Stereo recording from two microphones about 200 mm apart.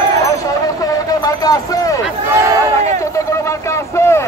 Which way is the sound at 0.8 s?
20° left (ahead or behind).